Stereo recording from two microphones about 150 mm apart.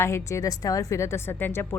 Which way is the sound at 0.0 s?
20° left (ahead or behind).